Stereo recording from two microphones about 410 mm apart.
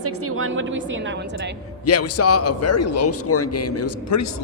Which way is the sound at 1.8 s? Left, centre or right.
Left.